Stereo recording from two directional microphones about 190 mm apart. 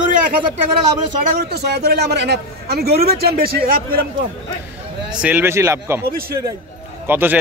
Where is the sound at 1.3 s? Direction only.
55° right (ahead or behind).